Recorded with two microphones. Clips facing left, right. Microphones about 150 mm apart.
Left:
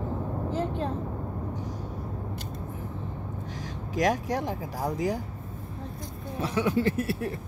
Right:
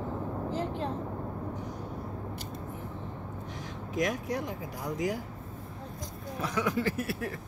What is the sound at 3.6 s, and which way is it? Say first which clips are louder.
Vehicle: left 4 dB; 90° left.